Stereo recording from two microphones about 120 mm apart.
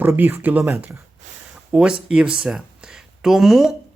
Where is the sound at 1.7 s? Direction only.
5° right (ahead or behind).